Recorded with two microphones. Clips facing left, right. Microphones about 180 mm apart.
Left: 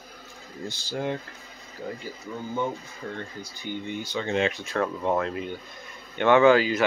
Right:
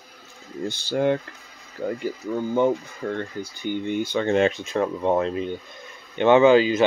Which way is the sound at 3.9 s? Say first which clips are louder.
Right 7 dB; 55° right (ahead or behind).